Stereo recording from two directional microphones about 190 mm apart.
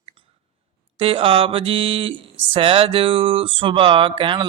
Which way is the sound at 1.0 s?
30° right (ahead or behind).